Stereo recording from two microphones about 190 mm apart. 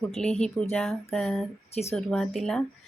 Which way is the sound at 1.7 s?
35° left (ahead or behind).